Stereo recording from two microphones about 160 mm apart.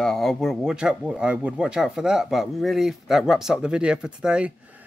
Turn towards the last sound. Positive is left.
turn(degrees=-5)  # may be behind; listen again after turning